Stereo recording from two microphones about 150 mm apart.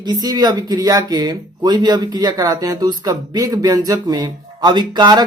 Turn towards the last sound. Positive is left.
turn(degrees=-30)  # may be behind; listen again after turning